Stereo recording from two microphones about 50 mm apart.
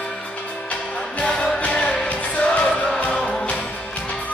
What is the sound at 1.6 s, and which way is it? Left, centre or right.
Music, centre.